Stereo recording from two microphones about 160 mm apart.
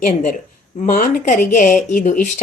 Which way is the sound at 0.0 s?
55° left (ahead or behind).